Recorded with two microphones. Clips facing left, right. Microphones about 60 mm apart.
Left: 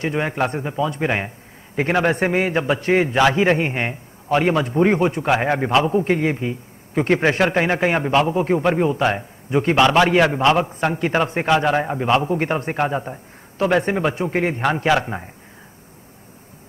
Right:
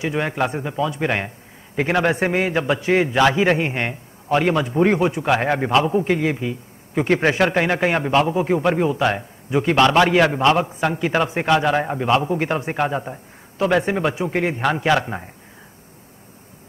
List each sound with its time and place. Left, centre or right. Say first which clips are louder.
0.2 s a man's voice: even; centre
6.3 s speech: left 1 dB; centre
7.0 s a man's voice: even; centre